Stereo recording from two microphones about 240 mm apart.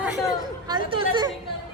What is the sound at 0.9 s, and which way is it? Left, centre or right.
Speech, right.